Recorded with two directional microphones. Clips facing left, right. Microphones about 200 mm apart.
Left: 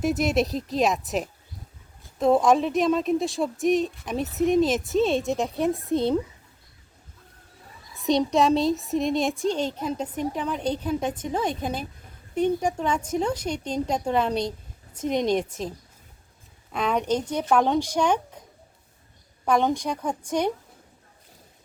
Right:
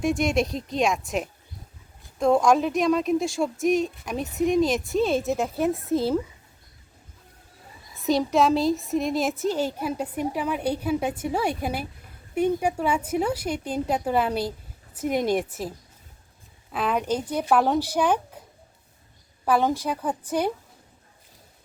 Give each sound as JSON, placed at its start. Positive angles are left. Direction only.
{"t": 0.0, "sound": "speech", "side_deg": 5}
{"t": 8.0, "sound": "speech", "side_deg": 0}
{"t": 16.7, "sound": "speech", "side_deg": -5}
{"t": 19.5, "sound": "speech", "side_deg": -5}